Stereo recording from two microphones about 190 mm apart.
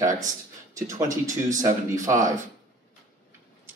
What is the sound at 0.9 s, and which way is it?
Speech, 40° right (ahead or behind).